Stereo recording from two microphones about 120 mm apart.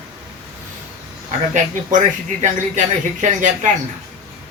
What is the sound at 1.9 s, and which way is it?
Speech, 90° right.